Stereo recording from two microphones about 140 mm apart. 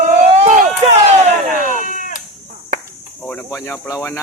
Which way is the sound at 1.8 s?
65° left (ahead or behind).